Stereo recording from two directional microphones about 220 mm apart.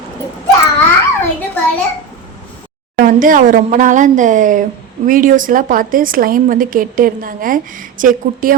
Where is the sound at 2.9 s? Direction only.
40° right (ahead or behind).